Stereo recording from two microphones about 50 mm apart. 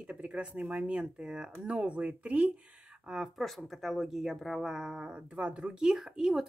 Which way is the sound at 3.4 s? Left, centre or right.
Centre.